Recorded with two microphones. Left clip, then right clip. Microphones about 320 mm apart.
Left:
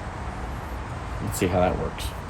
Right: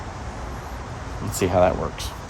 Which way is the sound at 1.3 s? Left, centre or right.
Centre.